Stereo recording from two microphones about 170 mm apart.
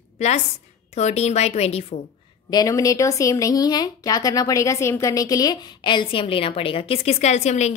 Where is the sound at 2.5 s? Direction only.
20° left (ahead or behind).